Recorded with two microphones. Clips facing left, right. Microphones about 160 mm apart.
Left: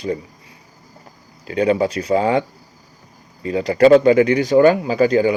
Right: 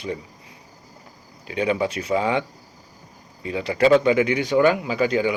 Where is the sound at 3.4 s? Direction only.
40° left (ahead or behind).